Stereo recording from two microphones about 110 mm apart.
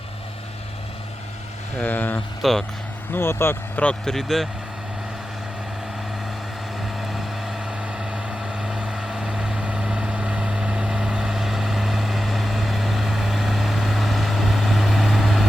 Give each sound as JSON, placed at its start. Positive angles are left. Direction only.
{"t": 1.8, "sound": "speech", "side_deg": 15}
{"t": 2.4, "sound": "speech", "side_deg": 0}
{"t": 3.1, "sound": "speech", "side_deg": 20}
{"t": 7.0, "sound": "vehicle", "side_deg": 0}